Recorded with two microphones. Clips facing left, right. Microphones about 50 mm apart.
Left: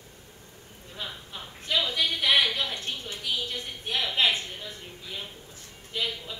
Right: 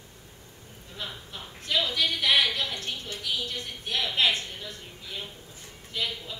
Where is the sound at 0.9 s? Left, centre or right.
Centre.